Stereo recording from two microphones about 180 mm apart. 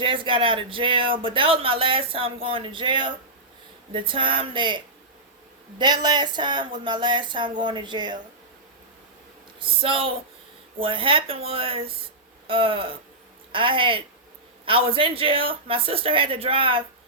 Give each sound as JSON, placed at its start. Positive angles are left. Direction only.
{"t": 0.0, "sound": "speech", "side_deg": -30}
{"t": 5.8, "sound": "speech", "side_deg": -25}
{"t": 9.6, "sound": "speech", "side_deg": -30}